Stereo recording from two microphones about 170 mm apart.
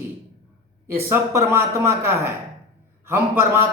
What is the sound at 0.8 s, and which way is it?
A man's voice, 15° right (ahead or behind).